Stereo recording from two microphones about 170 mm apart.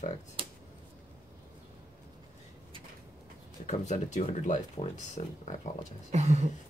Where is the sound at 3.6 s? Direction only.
45° left (ahead or behind).